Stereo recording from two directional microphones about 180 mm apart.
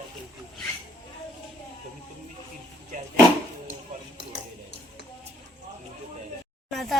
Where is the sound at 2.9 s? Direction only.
45° right (ahead or behind).